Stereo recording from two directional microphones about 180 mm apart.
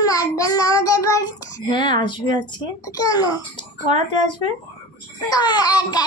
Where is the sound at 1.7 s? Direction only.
25° left (ahead or behind).